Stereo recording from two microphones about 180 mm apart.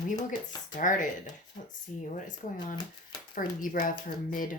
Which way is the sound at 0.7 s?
45° left (ahead or behind).